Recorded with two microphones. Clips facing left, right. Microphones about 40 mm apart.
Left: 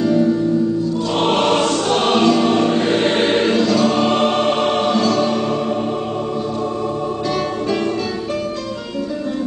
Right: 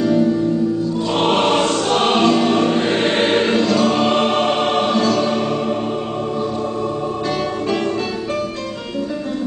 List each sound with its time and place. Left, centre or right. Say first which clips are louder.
0.0 s music: even; centre
1.4 s music: even; centre
2.0 s choir: even; centre
3.9 s music: even; centre